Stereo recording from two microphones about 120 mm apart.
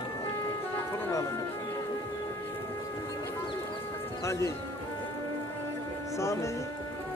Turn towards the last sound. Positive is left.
turn(degrees=25)  # may be behind; listen again after turning